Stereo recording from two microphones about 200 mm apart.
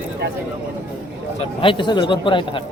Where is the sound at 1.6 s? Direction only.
25° left (ahead or behind).